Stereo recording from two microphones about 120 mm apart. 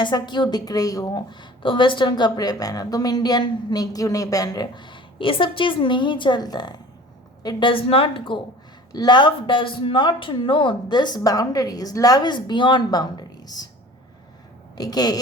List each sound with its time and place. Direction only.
0.0 s a woman's voice: 40° left (ahead or behind)
8.9 s a woman's voice: 35° left (ahead or behind)
14.8 s a woman's voice: 35° left (ahead or behind)